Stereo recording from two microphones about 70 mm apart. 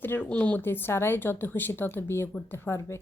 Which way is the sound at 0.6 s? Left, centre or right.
Left.